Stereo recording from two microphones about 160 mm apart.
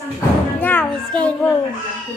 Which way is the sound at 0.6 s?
10° left (ahead or behind).